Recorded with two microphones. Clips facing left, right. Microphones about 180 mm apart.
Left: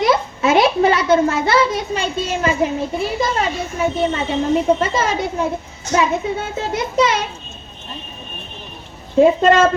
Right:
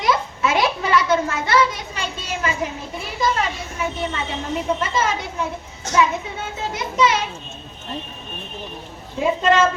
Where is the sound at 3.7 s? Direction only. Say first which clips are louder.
Left 7 dB; 30° left (ahead or behind).